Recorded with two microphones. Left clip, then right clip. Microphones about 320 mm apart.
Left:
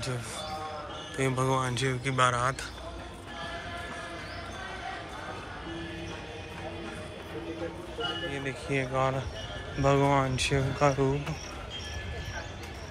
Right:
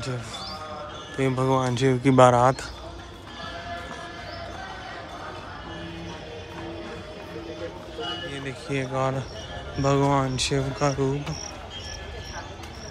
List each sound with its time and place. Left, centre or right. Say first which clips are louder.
1.1 s speech: right 5 dB; centre
8.3 s speech: right 1 dB; centre